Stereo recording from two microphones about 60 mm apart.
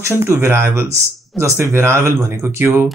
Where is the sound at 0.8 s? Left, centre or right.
Right.